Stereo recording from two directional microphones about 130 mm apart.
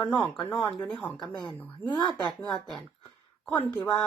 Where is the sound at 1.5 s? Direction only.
15° left (ahead or behind).